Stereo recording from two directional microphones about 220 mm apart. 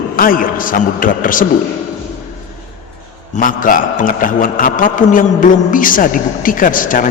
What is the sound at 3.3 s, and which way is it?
A man's voice, 40° left (ahead or behind).